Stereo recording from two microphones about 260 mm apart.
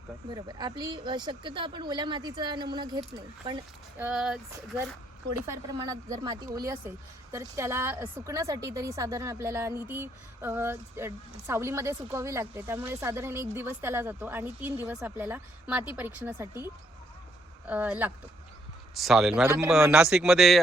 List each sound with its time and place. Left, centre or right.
0.3 s a woman's voice: centre
5.5 s a woman's voice: centre
17.7 s a woman's voice: centre